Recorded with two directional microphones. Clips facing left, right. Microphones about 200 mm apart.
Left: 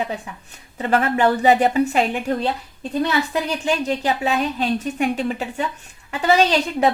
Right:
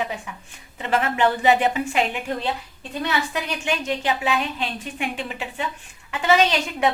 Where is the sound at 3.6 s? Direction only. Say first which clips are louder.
Left 2 dB; 35° left (ahead or behind).